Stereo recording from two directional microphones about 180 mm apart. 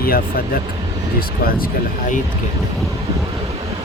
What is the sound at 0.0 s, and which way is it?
Speech, 55° left (ahead or behind).